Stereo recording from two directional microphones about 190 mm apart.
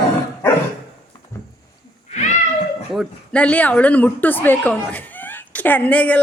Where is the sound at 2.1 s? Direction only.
40° left (ahead or behind).